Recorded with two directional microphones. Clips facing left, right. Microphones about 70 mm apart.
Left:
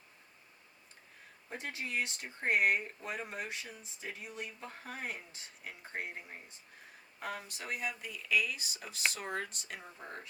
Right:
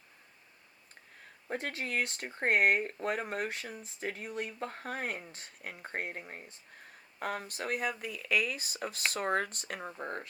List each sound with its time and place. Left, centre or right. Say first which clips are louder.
1.5 s speech: right 5 dB; right